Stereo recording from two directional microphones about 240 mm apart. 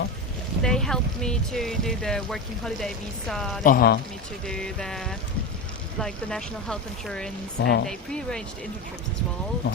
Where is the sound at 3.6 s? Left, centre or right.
Left.